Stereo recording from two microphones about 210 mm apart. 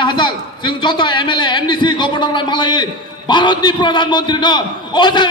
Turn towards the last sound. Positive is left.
turn(degrees=20)  # may be behind; listen again after turning